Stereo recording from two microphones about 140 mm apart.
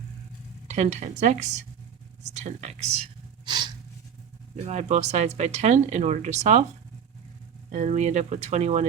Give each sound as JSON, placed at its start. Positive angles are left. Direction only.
{"t": 0.7, "sound": "speech", "side_deg": -55}
{"t": 3.4, "sound": "gasp", "side_deg": -30}
{"t": 4.6, "sound": "speech", "side_deg": -50}
{"t": 7.7, "sound": "speech", "side_deg": -55}